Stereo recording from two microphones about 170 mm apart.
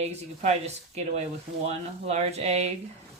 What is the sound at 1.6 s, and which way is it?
Speech, 40° right (ahead or behind).